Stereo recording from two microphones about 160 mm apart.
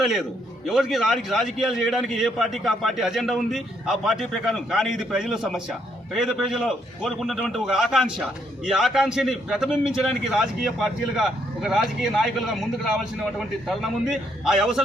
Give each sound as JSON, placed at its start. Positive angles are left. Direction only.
{"t": 0.0, "sound": "a man's voice", "side_deg": 0}